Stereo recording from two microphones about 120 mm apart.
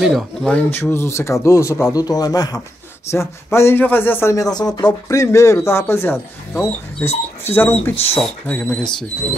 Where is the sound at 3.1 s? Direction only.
20° left (ahead or behind).